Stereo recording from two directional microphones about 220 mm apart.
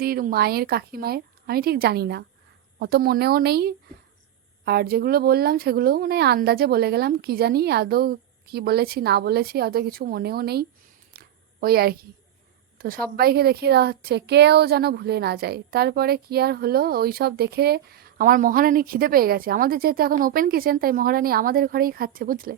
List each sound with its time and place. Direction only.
0.0 s speech: 40° right (ahead or behind)
11.1 s a sound: 45° right (ahead or behind)
11.6 s speech: 45° right (ahead or behind)